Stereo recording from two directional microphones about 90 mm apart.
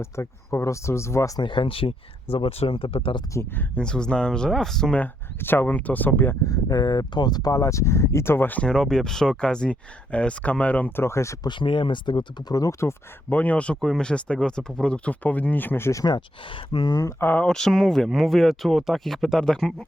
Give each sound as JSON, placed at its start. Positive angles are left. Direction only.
{"t": 0.0, "sound": "speech", "side_deg": 30}
{"t": 1.4, "sound": "speech", "side_deg": 65}
{"t": 3.3, "sound": "speech", "side_deg": 25}
{"t": 3.8, "sound": "speech", "side_deg": 10}
{"t": 4.9, "sound": "speech", "side_deg": 20}
{"t": 6.4, "sound": "speech", "side_deg": 40}
{"t": 8.6, "sound": "speech", "side_deg": 5}
{"t": 11.4, "sound": "speech", "side_deg": 60}
{"t": 12.5, "sound": "speech", "side_deg": 40}
{"t": 13.3, "sound": "speech", "side_deg": 15}
{"t": 16.5, "sound": "speech", "side_deg": 70}
{"t": 17.0, "sound": "speech", "side_deg": 35}
{"t": 17.2, "sound": "speech", "side_deg": 15}